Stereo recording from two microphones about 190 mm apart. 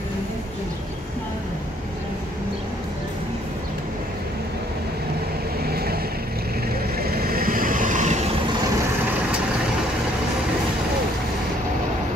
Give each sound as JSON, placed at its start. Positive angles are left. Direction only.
{"t": 5.6, "sound": "vehicle", "side_deg": -55}
{"t": 7.0, "sound": "vehicle", "side_deg": -50}